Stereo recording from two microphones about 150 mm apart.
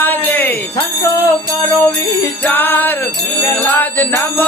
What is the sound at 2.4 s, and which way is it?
Music, 15° left (ahead or behind).